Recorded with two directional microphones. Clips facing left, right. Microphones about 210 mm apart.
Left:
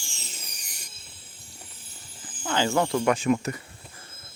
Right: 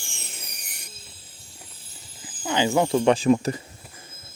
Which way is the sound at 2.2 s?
10° right (ahead or behind).